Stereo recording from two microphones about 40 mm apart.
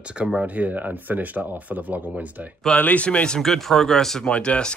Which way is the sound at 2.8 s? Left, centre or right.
Left.